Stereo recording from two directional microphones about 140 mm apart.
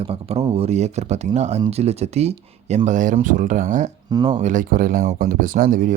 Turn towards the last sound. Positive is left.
turn(degrees=-80)